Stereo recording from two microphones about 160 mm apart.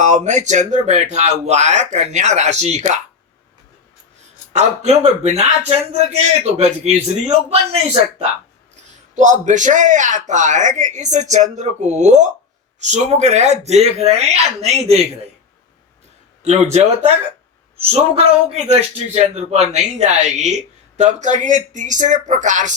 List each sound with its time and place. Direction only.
0.0 s a man's voice: 50° right (ahead or behind)
4.5 s a man's voice: 45° right (ahead or behind)
16.4 s a man's voice: 45° right (ahead or behind)
17.8 s a man's voice: 40° right (ahead or behind)